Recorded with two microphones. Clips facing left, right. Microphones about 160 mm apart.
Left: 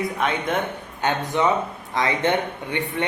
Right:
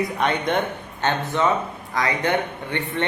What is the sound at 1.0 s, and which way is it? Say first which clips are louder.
A man's voice: even; 15° left (ahead or behind).